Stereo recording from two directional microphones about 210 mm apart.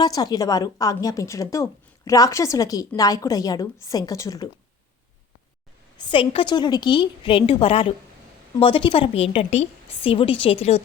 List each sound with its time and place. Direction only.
0.0 s a woman's voice: 20° left (ahead or behind)
6.0 s a woman's voice: 25° left (ahead or behind)